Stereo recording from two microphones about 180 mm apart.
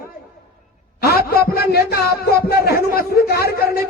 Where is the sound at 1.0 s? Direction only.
60° left (ahead or behind).